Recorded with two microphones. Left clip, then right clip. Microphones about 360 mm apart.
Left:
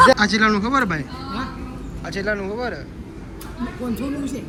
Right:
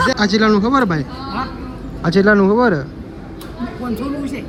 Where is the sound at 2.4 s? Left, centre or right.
Right.